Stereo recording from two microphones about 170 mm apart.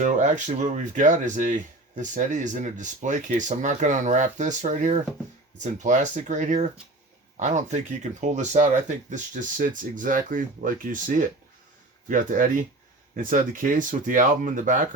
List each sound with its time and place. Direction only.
0.0 s speech: 45° right (ahead or behind)